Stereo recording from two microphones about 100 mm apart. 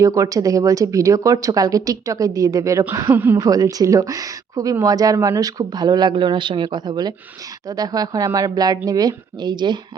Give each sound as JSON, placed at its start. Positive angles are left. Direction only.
{"t": 0.0, "sound": "speech", "side_deg": -35}
{"t": 3.1, "sound": "a woman's voice", "side_deg": -20}
{"t": 3.3, "sound": "speech", "side_deg": -35}